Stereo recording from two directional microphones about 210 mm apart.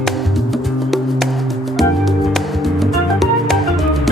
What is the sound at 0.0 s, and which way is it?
Music, centre (ahead or behind).